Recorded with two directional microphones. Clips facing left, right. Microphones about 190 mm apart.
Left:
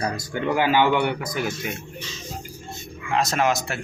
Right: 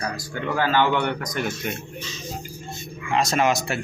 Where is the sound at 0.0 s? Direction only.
20° left (ahead or behind); by 1.7 s 5° left (ahead or behind).